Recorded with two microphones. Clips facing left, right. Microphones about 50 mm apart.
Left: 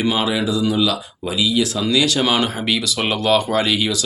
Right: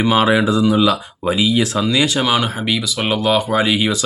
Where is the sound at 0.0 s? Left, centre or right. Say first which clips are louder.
Right 5 dB; right.